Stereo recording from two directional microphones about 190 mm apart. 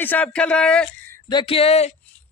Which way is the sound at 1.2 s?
25° left (ahead or behind).